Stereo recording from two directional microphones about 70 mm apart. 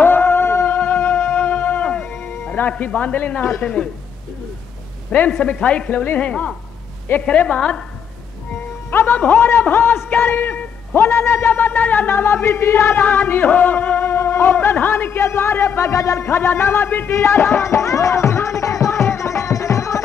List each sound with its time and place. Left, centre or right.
0.0 s music: left
0.7 s music: centre
2.7 s a man's voice: centre
5.1 s a man's voice: centre
8.9 s music: left
9.4 s speech: left
11.0 s speech: left
14.0 s speech: left
15.1 s speech: left
16.3 s music: left